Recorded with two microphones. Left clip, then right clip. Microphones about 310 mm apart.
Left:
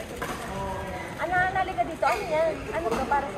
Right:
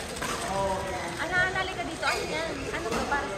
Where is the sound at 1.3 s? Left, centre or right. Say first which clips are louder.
Left 2 dB; centre.